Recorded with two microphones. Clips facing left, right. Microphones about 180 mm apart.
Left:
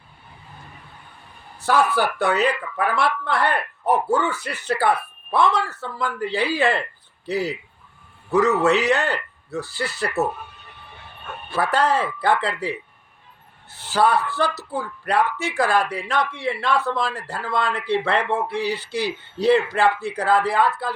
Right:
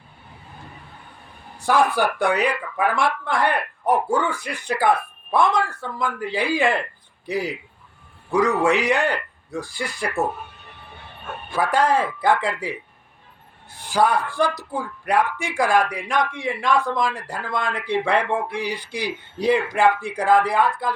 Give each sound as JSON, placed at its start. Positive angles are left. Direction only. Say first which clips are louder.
{"t": 1.6, "sound": "speech", "louder": "right 1 dB", "side_deg": -15}
{"t": 11.7, "sound": "speech", "louder": "right 1 dB", "side_deg": -10}
{"t": 13.7, "sound": "speech", "louder": "even", "side_deg": -15}